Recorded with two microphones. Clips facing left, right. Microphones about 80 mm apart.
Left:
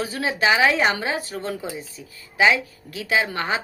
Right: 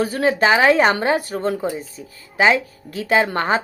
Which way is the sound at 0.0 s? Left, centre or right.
Right.